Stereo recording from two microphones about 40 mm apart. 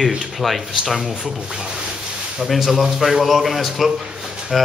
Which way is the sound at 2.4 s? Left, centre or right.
Centre.